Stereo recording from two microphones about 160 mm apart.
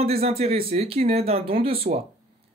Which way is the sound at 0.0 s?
40° right (ahead or behind).